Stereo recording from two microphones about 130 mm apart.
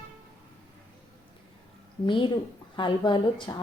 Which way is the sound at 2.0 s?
40° left (ahead or behind).